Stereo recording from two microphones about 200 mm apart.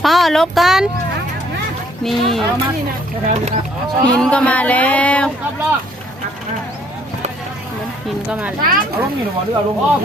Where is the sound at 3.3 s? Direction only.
35° right (ahead or behind).